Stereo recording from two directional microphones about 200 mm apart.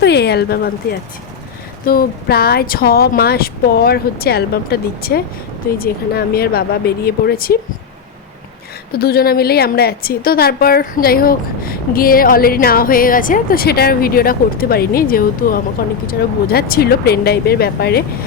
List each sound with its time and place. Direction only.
0.0 s a sound: 55° left (ahead or behind)
1.8 s a woman's voice: 45° left (ahead or behind)
8.9 s a woman's voice: 50° left (ahead or behind)